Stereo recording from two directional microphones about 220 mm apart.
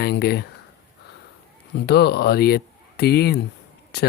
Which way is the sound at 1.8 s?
45° left (ahead or behind).